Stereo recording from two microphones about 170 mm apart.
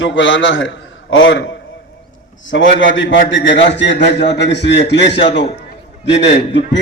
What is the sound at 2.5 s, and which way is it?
A man's voice, 90° left.